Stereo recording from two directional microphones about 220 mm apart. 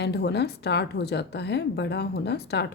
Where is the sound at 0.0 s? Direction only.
50° left (ahead or behind).